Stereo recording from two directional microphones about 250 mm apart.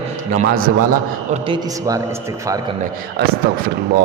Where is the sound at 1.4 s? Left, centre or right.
Centre.